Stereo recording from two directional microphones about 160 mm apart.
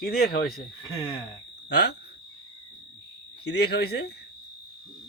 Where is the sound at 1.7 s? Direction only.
90° left.